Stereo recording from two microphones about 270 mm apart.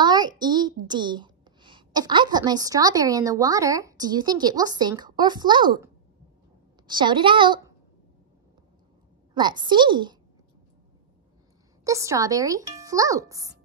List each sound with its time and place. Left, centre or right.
0.0 s a woman's voice: centre
6.9 s speech: centre
9.3 s speech: centre
11.8 s speech: centre